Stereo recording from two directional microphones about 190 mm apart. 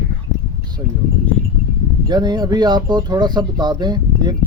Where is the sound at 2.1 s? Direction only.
20° right (ahead or behind).